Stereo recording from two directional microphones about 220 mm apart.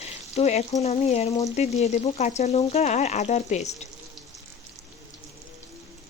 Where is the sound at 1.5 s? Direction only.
30° left (ahead or behind).